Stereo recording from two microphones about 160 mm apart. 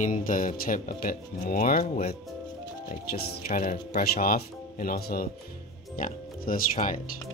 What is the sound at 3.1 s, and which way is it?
Speech, 60° left (ahead or behind).